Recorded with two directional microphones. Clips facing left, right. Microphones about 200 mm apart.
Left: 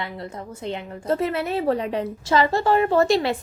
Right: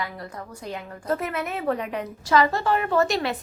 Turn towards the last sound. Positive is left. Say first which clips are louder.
# left 4 dB
turn(degrees=30)  # may be behind; listen again after turning